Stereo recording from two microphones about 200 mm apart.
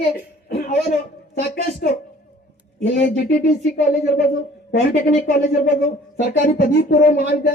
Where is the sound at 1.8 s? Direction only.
50° left (ahead or behind).